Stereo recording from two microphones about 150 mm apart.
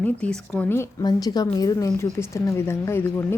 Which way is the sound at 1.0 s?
25° left (ahead or behind).